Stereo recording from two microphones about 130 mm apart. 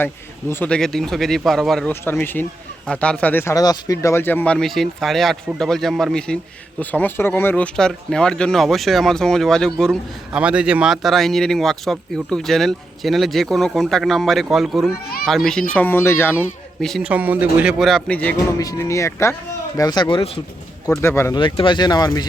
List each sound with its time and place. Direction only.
0.0 s speech: 15° left (ahead or behind)
0.7 s a man's voice: 5° left (ahead or behind)
1.9 s speech: 15° left (ahead or behind)
3.5 s a man's voice: 30° left (ahead or behind); by 10.0 s 5° left (ahead or behind)
10.3 s a man's voice: 10° right (ahead or behind); by 16.3 s 15° left (ahead or behind)
17.0 s speech: 10° right (ahead or behind); by 18.3 s 10° left (ahead or behind)
18.6 s speech: 25° left (ahead or behind); by 20.4 s 45° left (ahead or behind)
21.0 s speech: 20° left (ahead or behind)
21.3 s speech: 40° left (ahead or behind)